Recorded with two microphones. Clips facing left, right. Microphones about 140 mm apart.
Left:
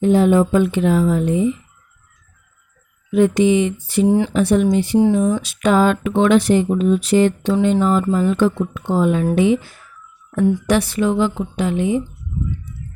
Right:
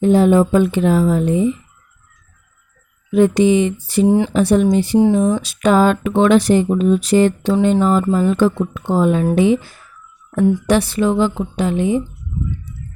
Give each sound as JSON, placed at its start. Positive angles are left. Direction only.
{"t": 0.0, "sound": "speech", "side_deg": -40}
{"t": 3.1, "sound": "speech", "side_deg": -35}
{"t": 4.0, "sound": "speech", "side_deg": -20}
{"t": 4.3, "sound": "speech", "side_deg": -35}